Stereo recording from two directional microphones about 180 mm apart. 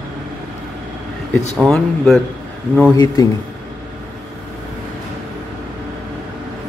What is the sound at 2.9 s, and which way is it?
Speech, 20° left (ahead or behind).